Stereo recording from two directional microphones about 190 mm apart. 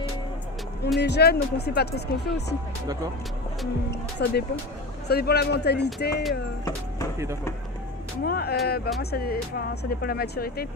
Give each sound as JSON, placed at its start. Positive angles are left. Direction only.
{"t": 1.0, "sound": "speech", "side_deg": 60}
{"t": 3.9, "sound": "speech", "side_deg": 60}
{"t": 8.2, "sound": "speech", "side_deg": 55}